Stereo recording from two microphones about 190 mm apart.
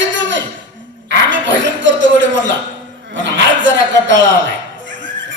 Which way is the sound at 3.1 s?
75° right (ahead or behind).